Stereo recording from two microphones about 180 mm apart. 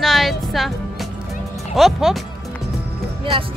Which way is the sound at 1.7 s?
Centre (ahead or behind).